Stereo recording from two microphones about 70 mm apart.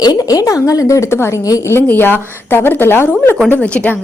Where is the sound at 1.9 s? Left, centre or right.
Left.